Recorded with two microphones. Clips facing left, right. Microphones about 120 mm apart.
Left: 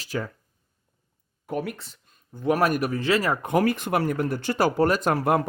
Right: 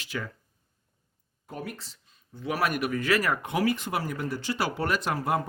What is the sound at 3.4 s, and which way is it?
Speech, 50° left (ahead or behind).